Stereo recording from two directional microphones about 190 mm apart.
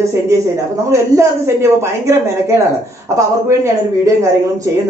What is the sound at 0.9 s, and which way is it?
Speech, 15° right (ahead or behind).